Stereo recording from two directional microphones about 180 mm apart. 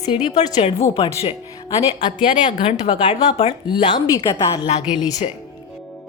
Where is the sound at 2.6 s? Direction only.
30° left (ahead or behind).